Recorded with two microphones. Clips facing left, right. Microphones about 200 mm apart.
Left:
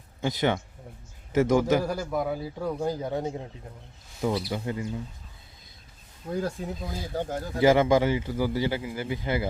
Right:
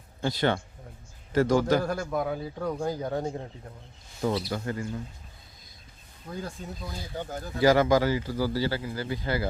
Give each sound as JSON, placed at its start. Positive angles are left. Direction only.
{"t": 0.2, "sound": "speech", "side_deg": 15}
{"t": 1.8, "sound": "a man's voice", "side_deg": 5}
{"t": 4.5, "sound": "speech", "side_deg": 15}
{"t": 6.3, "sound": "speech", "side_deg": 70}
{"t": 6.7, "sound": "speech", "side_deg": 45}
{"t": 7.6, "sound": "speech", "side_deg": 25}